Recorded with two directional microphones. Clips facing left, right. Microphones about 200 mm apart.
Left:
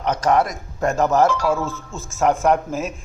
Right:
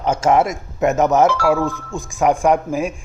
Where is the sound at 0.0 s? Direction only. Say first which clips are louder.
Right 3 dB; 25° right (ahead or behind).